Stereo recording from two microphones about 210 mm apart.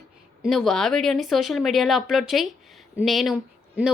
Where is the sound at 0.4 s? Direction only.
Centre (ahead or behind).